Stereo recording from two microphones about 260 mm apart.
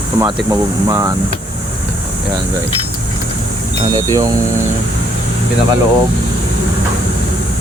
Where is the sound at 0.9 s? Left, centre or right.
Centre.